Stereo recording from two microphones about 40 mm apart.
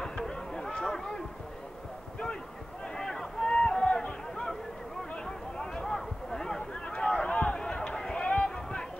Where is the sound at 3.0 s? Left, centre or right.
Centre.